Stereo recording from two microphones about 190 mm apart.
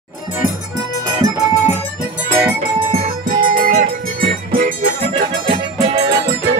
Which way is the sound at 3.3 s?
45° right (ahead or behind).